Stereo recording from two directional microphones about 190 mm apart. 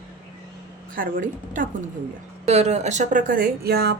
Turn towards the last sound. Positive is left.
turn(degrees=-55)  # may be behind; listen again after turning